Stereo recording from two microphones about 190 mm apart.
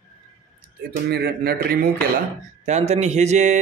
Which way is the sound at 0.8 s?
55° right (ahead or behind).